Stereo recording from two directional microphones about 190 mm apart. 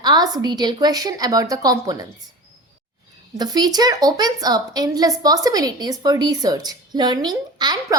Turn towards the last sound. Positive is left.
turn(degrees=-20)  # may be behind; listen again after turning